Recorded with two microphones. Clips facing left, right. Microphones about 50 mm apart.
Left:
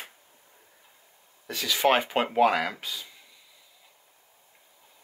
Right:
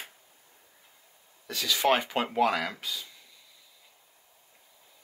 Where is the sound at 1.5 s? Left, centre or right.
Left.